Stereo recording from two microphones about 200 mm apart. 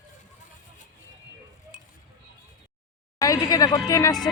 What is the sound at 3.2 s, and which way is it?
A woman's voice, 20° left (ahead or behind).